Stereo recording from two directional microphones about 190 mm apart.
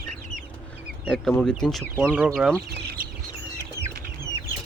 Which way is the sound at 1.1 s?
5° left (ahead or behind).